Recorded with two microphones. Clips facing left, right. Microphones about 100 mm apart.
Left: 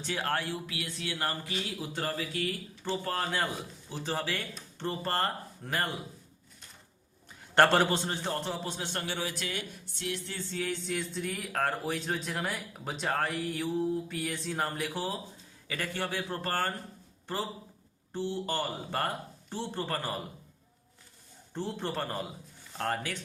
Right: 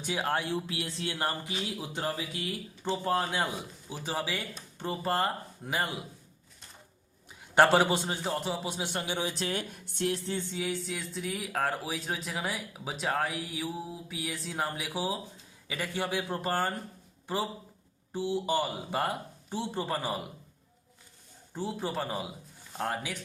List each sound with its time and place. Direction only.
0.0 s speech: 15° right (ahead or behind)
0.7 s speech: 30° right (ahead or behind); by 5.9 s 10° right (ahead or behind)
7.5 s speech: 10° right (ahead or behind); by 9.6 s 30° right (ahead or behind)
9.6 s a woman's voice: 55° right (ahead or behind)
10.1 s speech: 25° right (ahead or behind)
10.5 s speech: 10° right (ahead or behind)
18.1 s speech: 10° right (ahead or behind)
21.5 s speech: 5° right (ahead or behind)